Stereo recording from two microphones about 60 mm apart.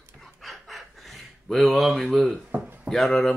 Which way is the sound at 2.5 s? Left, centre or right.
Right.